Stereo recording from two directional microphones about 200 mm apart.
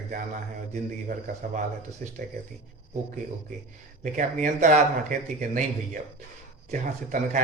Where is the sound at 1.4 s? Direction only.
40° right (ahead or behind).